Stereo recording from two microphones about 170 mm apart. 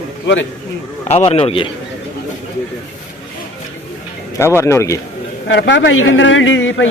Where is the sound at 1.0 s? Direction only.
35° left (ahead or behind).